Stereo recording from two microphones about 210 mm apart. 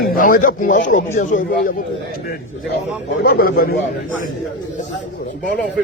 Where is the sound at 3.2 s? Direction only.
45° left (ahead or behind).